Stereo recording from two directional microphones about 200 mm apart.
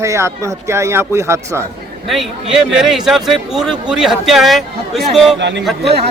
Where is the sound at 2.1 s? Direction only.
Centre (ahead or behind).